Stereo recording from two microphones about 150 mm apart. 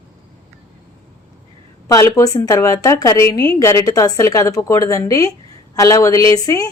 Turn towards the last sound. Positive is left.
turn(degrees=20)  # may be behind; listen again after turning